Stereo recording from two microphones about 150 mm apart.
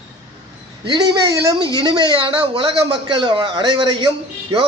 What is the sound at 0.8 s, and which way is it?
A man's voice, 30° right (ahead or behind).